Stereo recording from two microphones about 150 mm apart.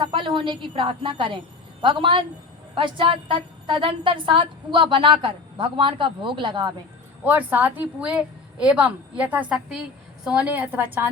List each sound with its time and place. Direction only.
0.0 s a woman's voice: 35° right (ahead or behind)
7.3 s a woman's voice: 10° right (ahead or behind)